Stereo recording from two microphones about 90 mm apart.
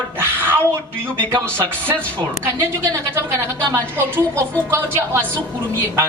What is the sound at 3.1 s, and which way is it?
A man's voice, 30° right (ahead or behind).